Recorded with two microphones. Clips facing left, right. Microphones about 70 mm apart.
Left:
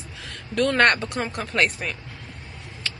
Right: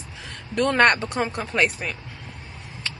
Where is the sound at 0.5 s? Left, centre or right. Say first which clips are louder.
Right 1 dB; centre.